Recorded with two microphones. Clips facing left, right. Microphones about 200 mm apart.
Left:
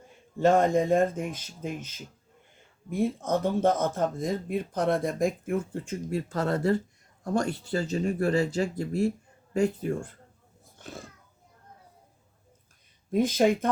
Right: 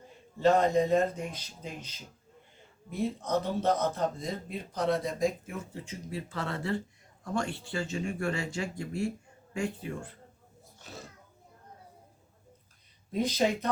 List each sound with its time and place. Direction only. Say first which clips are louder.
0.3 s speech: left 2 dB; 50° left (ahead or behind)
10.8 s a sound: left 6 dB; 55° left (ahead or behind)
13.1 s speech: left 5 dB; 50° left (ahead or behind)